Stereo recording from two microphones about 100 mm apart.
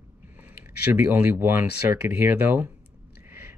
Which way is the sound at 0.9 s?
20° right (ahead or behind).